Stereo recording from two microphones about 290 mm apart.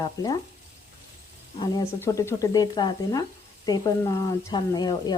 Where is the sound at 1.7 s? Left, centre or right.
Centre.